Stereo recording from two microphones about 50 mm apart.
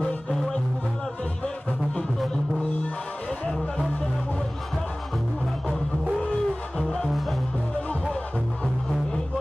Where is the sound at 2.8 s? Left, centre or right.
Left.